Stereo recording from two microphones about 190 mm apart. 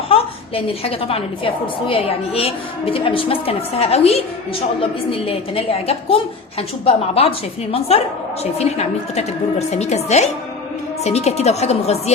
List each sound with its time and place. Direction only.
0.1 s a woman's voice: 30° left (ahead or behind)